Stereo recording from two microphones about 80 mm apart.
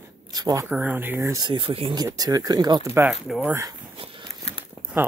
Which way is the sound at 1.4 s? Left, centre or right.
Right.